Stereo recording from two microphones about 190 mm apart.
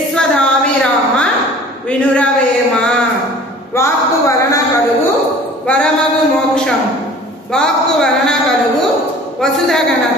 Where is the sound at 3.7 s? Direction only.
15° left (ahead or behind).